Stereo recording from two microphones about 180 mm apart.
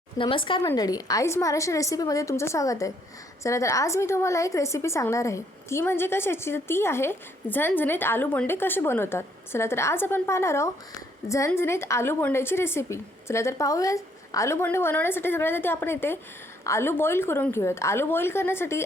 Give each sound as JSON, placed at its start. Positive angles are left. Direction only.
{"t": 0.2, "sound": "a woman's voice", "side_deg": 30}